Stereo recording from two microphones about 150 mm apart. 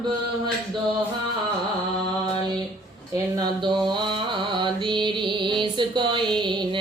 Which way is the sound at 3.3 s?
30° right (ahead or behind).